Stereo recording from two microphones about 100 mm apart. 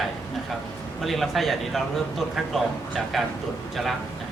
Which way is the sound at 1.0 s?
Centre (ahead or behind).